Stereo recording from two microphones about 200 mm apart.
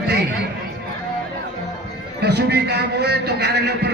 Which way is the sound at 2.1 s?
55° right (ahead or behind).